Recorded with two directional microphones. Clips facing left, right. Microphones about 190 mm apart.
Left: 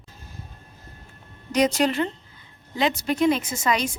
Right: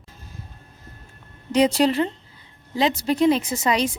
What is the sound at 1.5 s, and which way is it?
A woman's voice, 30° right (ahead or behind).